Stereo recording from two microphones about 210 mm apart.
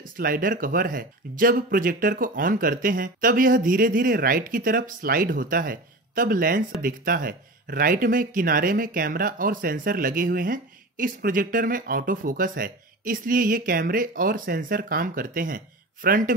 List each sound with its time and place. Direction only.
0.0 s speech: 40° right (ahead or behind)